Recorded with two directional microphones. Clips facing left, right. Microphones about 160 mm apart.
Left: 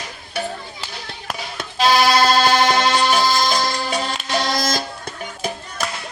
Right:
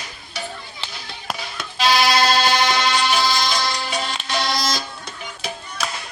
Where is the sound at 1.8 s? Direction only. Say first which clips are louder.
Left 3 dB; 45° left (ahead or behind).